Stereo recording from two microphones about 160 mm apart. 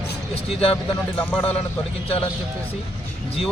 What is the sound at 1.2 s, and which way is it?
Speech, 10° left (ahead or behind).